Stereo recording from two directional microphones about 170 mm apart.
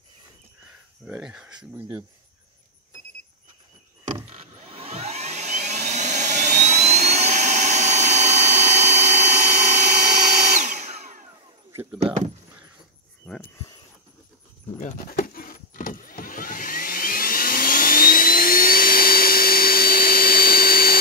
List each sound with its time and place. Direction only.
1.0 s speech: 5° right (ahead or behind)
4.3 s vacuum cleaner: 35° right (ahead or behind)
11.7 s keys jangling: 15° right (ahead or behind)
14.8 s vehicle: 50° left (ahead or behind)